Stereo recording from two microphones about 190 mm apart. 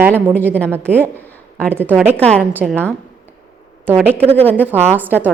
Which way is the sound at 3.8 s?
10° right (ahead or behind).